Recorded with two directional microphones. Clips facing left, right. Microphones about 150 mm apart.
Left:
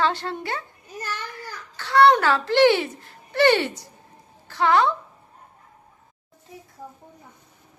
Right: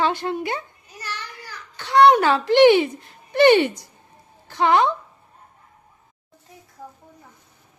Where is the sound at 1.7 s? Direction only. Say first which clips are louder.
Right 2 dB; 15° right (ahead or behind).